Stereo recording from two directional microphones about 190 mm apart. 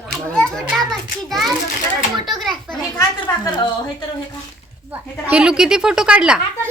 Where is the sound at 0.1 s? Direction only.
Centre (ahead or behind).